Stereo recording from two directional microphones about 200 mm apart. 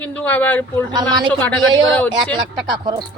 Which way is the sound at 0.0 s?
10° left (ahead or behind).